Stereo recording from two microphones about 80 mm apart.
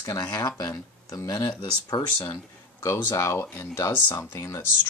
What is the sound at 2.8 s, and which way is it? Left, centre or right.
Speech, left.